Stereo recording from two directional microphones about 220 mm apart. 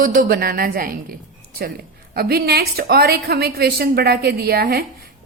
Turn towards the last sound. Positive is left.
turn(degrees=-45)  # may be behind; listen again after turning